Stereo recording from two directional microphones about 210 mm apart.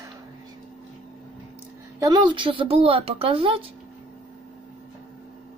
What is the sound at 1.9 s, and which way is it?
A woman's voice, 20° right (ahead or behind).